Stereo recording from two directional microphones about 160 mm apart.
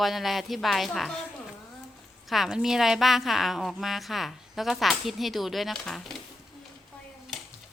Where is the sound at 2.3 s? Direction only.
5° right (ahead or behind).